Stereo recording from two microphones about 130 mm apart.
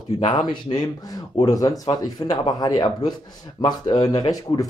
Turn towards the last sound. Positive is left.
turn(degrees=30)  # may be behind; listen again after turning